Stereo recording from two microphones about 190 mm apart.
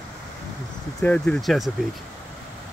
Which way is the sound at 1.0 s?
5° left (ahead or behind).